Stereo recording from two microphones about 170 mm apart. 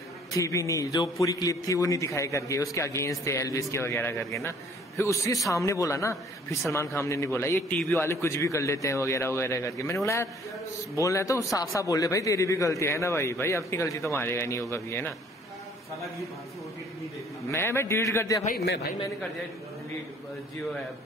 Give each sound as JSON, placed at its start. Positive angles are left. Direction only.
{"t": 0.3, "sound": "a man's voice", "side_deg": 20}
{"t": 17.5, "sound": "a man's voice", "side_deg": 15}